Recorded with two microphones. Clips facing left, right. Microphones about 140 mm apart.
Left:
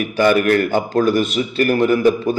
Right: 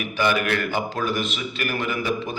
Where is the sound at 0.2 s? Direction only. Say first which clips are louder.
Left 8 dB; 45° left (ahead or behind).